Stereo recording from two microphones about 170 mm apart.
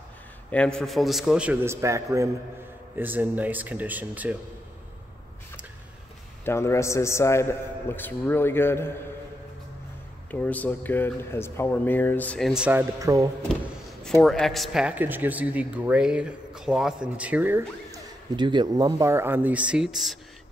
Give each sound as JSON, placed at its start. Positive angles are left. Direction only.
{"t": 0.5, "sound": "a man's voice", "side_deg": 5}
{"t": 6.4, "sound": "speech", "side_deg": 15}
{"t": 10.3, "sound": "speech", "side_deg": 10}
{"t": 13.0, "sound": "speech", "side_deg": -20}
{"t": 14.2, "sound": "speech", "side_deg": 0}
{"t": 18.3, "sound": "speech", "side_deg": -25}